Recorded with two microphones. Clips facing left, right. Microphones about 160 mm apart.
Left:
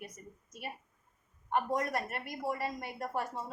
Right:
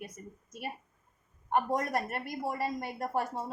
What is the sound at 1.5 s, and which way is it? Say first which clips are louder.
A woman's voice: right 3 dB; 40° right (ahead or behind).